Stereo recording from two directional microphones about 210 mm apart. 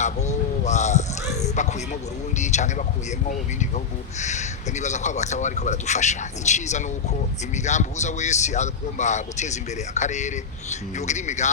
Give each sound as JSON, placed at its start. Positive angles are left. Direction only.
{"t": 0.0, "sound": "a sound", "side_deg": 35}
{"t": 2.4, "sound": "speech", "side_deg": 35}
{"t": 4.2, "sound": "speech", "side_deg": 35}